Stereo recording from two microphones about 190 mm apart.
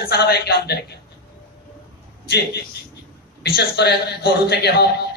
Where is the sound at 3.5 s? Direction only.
60° left (ahead or behind).